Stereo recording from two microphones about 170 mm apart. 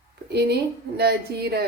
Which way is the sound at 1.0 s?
70° right (ahead or behind).